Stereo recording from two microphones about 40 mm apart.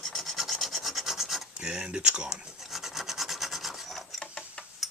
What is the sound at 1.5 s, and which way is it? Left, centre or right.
Speech, right.